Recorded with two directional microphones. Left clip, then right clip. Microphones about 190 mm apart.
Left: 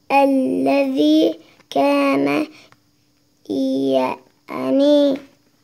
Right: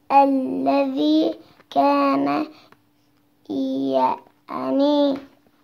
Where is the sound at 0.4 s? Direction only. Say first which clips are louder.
Left 3 dB; 50° left (ahead or behind).